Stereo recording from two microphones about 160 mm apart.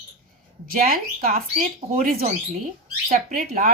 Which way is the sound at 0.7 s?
65° right (ahead or behind).